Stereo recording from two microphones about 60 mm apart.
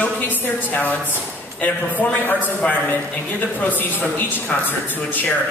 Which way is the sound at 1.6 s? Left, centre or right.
Left.